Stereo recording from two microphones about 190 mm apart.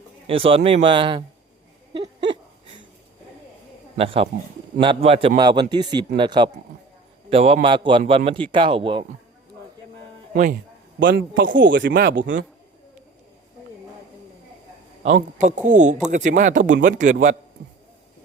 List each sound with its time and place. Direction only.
0.3 s a man's voice: 30° right (ahead or behind)
1.9 s hiccup: 25° right (ahead or behind)
3.9 s a man's voice: 30° right (ahead or behind)
10.3 s speech: 40° right (ahead or behind)
11.0 s a man's voice: 60° right (ahead or behind)
11.5 s speech: 70° right (ahead or behind)
15.0 s a man's voice: 40° right (ahead or behind)